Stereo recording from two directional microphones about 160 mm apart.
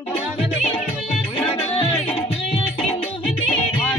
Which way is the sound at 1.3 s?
35° left (ahead or behind).